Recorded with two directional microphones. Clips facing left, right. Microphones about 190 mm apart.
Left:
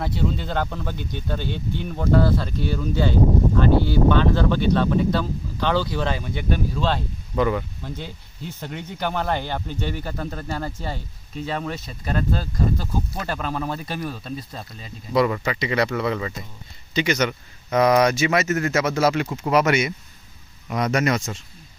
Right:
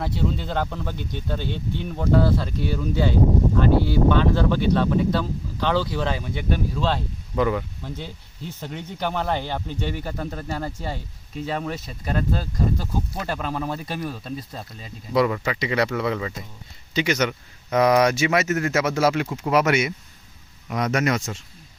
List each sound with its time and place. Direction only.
0.0 s speech: 5° right (ahead or behind)
10.0 s speech: 15° right (ahead or behind)